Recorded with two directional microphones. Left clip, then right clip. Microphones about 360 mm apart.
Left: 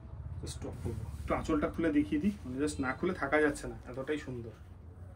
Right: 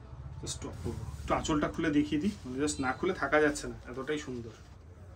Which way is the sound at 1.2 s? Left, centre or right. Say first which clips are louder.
Right 2 dB; centre.